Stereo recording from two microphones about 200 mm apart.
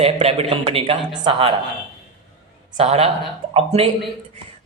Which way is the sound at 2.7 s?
30° right (ahead or behind).